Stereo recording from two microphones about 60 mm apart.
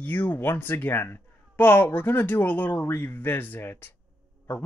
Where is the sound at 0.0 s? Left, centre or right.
Left.